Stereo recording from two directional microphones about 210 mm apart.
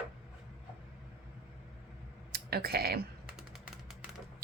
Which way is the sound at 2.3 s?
50° right (ahead or behind).